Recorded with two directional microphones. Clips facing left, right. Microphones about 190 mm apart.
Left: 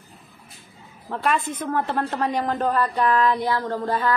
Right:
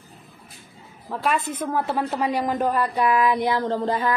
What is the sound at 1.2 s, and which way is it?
Speech, 5° right (ahead or behind).